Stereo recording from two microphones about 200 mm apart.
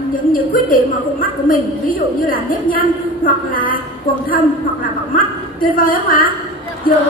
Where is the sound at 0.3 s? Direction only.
45° left (ahead or behind).